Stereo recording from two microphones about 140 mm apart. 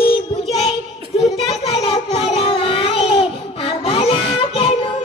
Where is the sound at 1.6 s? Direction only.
40° left (ahead or behind).